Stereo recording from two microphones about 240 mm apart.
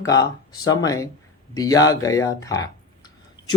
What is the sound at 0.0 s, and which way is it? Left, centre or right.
Speech, centre.